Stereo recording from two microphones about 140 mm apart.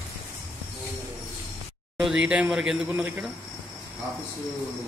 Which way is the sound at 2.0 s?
5° right (ahead or behind).